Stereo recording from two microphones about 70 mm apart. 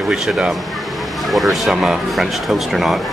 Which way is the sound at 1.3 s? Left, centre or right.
Centre.